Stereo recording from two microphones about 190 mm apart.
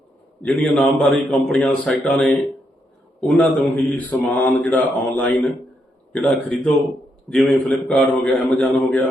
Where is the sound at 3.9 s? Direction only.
10° left (ahead or behind).